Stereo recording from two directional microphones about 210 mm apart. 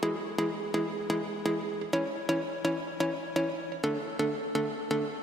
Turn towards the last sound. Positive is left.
turn(degrees=0)  # may be behind; listen again after turning